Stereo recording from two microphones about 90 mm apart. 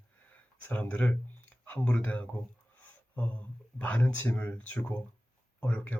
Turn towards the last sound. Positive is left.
turn(degrees=20)  # may be behind; listen again after turning